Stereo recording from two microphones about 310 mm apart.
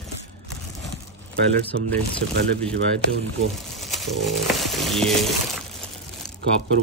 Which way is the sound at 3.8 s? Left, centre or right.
Centre.